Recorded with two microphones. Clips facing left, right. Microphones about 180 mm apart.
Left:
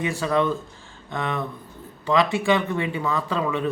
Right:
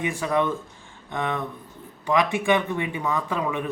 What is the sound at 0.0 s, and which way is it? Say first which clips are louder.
Speech: left 1 dB; 20° right (ahead or behind).